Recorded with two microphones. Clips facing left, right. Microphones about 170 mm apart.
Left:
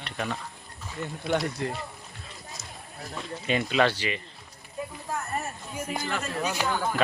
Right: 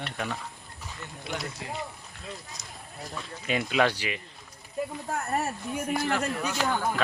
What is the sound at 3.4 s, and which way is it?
Speech, 5° right (ahead or behind).